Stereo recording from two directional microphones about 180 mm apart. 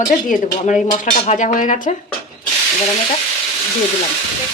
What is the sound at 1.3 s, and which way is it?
Speech, 40° left (ahead or behind).